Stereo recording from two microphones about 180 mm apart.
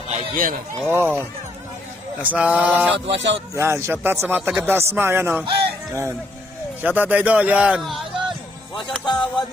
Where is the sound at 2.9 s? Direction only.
80° right.